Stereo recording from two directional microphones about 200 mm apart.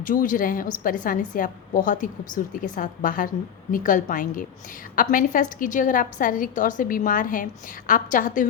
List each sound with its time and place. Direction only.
0.0 s a woman's voice: 40° left (ahead or behind)